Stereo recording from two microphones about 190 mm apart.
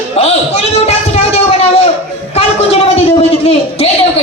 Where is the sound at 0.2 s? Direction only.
35° left (ahead or behind).